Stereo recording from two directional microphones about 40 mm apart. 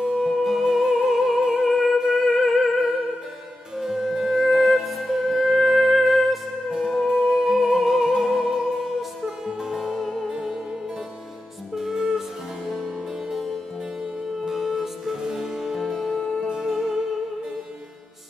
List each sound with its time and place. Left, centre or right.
0.1 s music: centre
1.7 s humming: centre
2.0 s music: centre
2.4 s music: centre
3.7 s music: centre
6.7 s music: centre
7.4 s music: centre
12.6 s harpsichord: centre
14.4 s music: centre
15.1 s harpsichord: centre
16.1 s music: centre
16.4 s music: centre